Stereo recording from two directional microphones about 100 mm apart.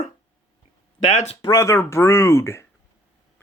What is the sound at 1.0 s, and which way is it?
Speech, 90° left.